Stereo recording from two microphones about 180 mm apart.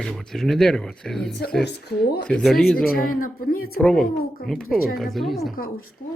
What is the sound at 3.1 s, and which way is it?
Speech, 55° left (ahead or behind).